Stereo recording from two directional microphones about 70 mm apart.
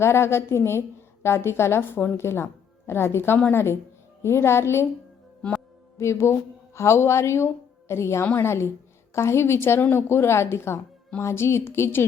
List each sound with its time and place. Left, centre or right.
0.0 s a woman's voice: left
6.0 s a woman's voice: left